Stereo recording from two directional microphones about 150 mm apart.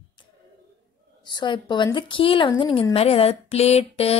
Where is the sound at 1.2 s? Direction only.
30° left (ahead or behind).